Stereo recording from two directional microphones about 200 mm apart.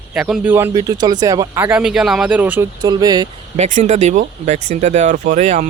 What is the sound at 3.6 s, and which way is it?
Speech, 40° right (ahead or behind).